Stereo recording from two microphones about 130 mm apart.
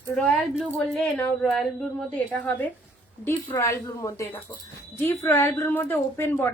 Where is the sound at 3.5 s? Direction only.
25° left (ahead or behind).